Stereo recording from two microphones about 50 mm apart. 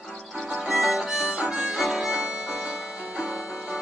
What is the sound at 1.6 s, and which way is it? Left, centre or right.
Harmonica, centre.